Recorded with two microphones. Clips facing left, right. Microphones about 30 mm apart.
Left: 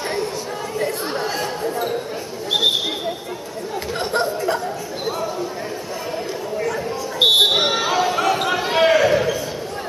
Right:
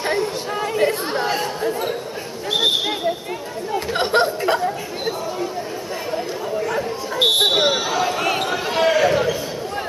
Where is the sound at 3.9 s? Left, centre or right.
Right.